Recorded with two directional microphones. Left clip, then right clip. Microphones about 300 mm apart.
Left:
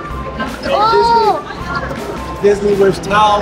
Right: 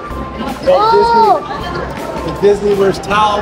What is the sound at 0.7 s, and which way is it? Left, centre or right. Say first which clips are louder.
Speech: right 1 dB; right.